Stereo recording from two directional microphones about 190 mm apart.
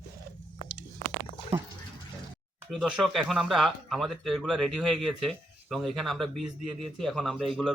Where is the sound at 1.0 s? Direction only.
30° right (ahead or behind).